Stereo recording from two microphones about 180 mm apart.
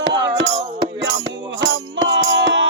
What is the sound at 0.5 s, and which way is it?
Music, 30° right (ahead or behind).